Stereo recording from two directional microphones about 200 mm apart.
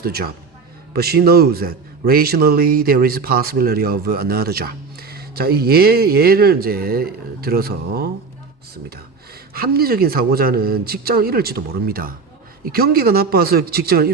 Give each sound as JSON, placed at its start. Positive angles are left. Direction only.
{"t": 0.0, "sound": "a man's voice", "side_deg": -50}
{"t": 9.5, "sound": "a man's voice", "side_deg": -50}